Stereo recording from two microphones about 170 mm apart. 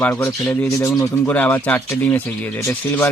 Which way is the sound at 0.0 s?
10° left (ahead or behind).